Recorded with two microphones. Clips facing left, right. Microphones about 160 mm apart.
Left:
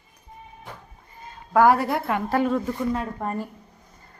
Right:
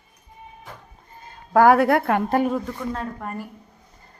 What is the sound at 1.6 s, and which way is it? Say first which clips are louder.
Speech: right 4 dB; 65° right (ahead or behind).